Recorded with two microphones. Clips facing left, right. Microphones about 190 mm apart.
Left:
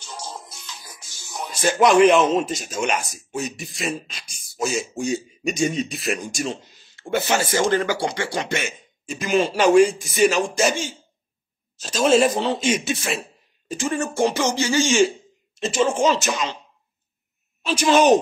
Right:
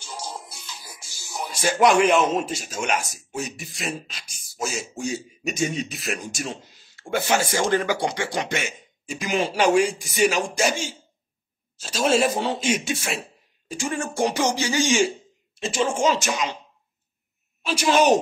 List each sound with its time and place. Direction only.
0.0 s music: 10° right (ahead or behind)
2.0 s a man's voice: 10° right (ahead or behind)
7.0 s a man's voice: 10° right (ahead or behind)
17.6 s a man's voice: 10° right (ahead or behind)